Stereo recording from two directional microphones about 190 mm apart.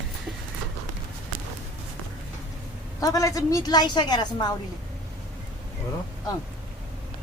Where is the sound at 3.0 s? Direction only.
20° left (ahead or behind).